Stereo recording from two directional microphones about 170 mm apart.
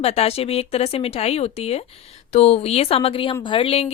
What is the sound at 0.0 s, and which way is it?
Speech, 35° left (ahead or behind).